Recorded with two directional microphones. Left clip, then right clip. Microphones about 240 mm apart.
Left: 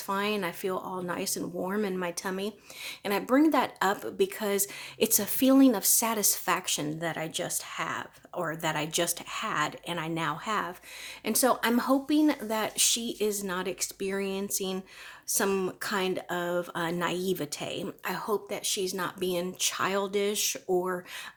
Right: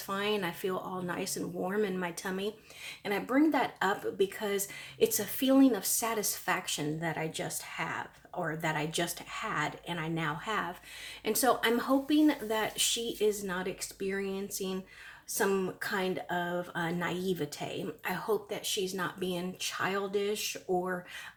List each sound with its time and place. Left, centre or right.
0.1 s speech: left